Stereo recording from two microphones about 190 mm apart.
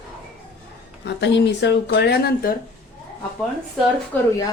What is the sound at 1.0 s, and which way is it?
A woman's voice, 65° left (ahead or behind).